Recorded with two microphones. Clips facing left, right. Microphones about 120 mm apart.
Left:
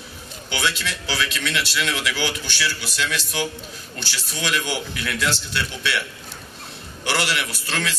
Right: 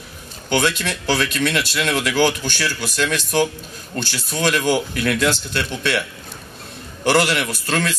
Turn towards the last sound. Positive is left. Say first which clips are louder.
# right 5 dB
turn(degrees=-45)  # may be behind; listen again after turning